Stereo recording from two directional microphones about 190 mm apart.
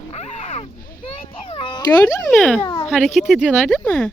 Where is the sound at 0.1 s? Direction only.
35° left (ahead or behind).